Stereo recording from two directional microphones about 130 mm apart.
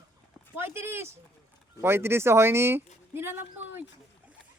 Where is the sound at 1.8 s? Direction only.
20° right (ahead or behind).